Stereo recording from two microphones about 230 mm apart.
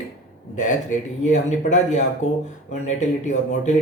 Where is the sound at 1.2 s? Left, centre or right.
Left.